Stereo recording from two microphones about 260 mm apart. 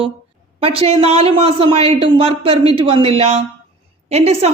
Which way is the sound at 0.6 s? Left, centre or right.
Right.